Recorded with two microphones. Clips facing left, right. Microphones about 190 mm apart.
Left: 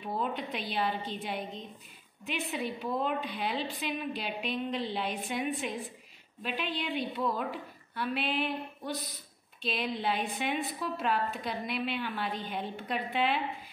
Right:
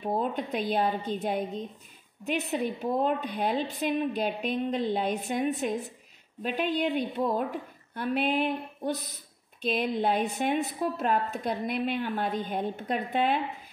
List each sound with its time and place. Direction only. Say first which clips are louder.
0.0 s a woman's voice: right 5 dB; 45° right (ahead or behind)